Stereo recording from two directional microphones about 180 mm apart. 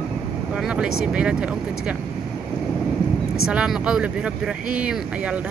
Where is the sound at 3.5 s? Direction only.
5° right (ahead or behind).